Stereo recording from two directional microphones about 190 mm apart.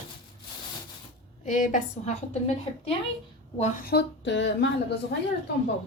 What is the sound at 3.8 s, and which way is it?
Speech, 60° left (ahead or behind).